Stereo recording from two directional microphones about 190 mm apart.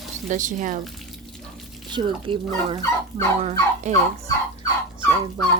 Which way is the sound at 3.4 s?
35° right (ahead or behind).